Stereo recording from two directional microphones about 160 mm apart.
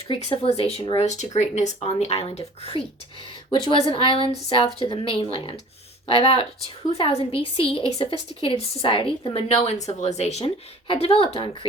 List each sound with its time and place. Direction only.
0.1 s a woman's voice: 40° left (ahead or behind)